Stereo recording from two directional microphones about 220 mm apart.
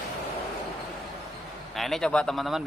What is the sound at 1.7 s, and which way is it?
Speech, centre (ahead or behind).